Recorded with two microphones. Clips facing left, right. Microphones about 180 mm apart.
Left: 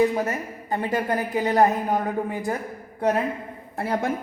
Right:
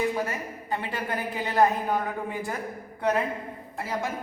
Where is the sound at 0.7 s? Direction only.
45° left (ahead or behind).